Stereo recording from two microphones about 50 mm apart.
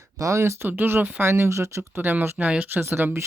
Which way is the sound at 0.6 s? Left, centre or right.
Right.